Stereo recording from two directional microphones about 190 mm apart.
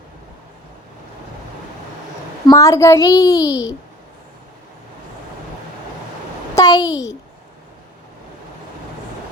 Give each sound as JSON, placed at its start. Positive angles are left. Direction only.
{"t": 2.5, "sound": "a child's voice", "side_deg": 15}
{"t": 6.6, "sound": "a child's voice", "side_deg": 20}